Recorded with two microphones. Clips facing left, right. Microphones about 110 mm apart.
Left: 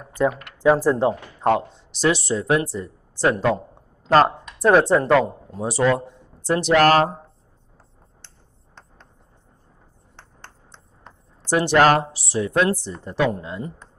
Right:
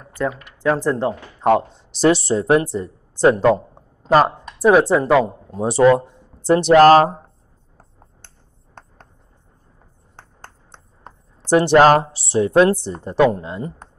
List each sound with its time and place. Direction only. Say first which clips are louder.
0.0 s speech: left 2 dB; 10° left (ahead or behind)
1.4 s speech: right 4 dB; centre (ahead or behind)
2.0 s speech: right 5 dB; 35° right (ahead or behind)
2.6 s speech: right 4 dB; 25° right (ahead or behind)
4.1 s speech: right 1 dB; 5° right (ahead or behind)
5.6 s speech: right 6 dB; 25° right (ahead or behind)
8.8 s a sound: right 5 dB; 50° right (ahead or behind)
10.1 s a sound: right 3 dB; 40° right (ahead or behind)
11.5 s speech: right 4 dB; 25° right (ahead or behind)